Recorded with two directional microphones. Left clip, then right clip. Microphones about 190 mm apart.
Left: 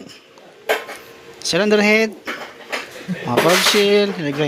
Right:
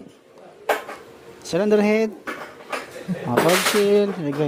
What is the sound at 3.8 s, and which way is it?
Speech, 5° right (ahead or behind).